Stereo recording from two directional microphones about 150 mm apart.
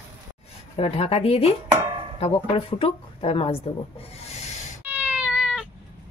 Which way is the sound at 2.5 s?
35° left (ahead or behind).